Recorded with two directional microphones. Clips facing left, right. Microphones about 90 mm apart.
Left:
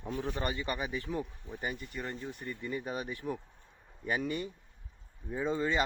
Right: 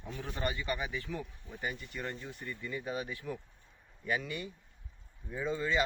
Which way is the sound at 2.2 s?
20° left (ahead or behind).